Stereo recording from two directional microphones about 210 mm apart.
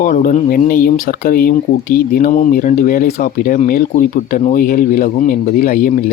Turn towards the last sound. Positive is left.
turn(degrees=40)  # may be behind; listen again after turning